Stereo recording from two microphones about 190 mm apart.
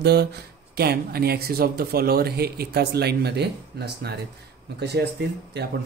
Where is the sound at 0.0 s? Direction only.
60° right (ahead or behind).